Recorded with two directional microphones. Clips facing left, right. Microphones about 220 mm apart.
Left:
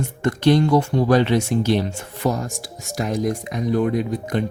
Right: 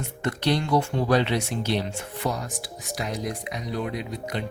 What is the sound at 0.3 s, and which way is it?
Speech, 45° left (ahead or behind).